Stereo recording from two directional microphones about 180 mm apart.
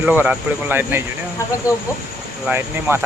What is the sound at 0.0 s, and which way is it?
Speech, 10° right (ahead or behind).